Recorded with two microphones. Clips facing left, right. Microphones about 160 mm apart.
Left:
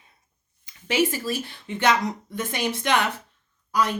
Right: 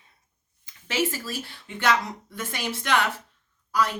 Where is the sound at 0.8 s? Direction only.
15° left (ahead or behind).